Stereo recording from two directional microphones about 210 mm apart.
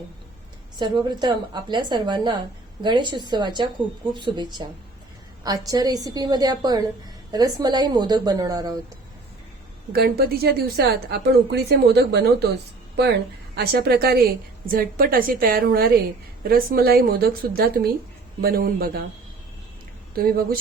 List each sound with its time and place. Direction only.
0.8 s a woman's voice: 20° right (ahead or behind)
9.9 s a woman's voice: 45° right (ahead or behind)
13.6 s a woman's voice: 50° right (ahead or behind)
20.1 s a woman's voice: 45° right (ahead or behind)